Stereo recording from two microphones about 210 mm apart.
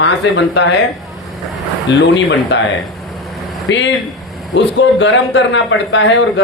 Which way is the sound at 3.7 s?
60° left (ahead or behind).